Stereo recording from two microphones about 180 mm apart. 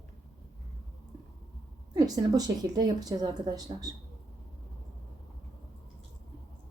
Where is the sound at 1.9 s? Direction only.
20° right (ahead or behind).